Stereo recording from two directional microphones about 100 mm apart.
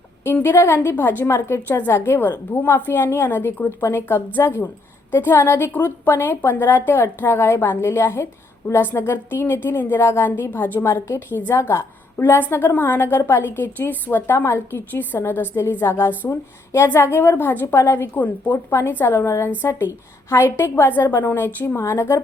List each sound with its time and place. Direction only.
0.3 s a woman's voice: 20° left (ahead or behind)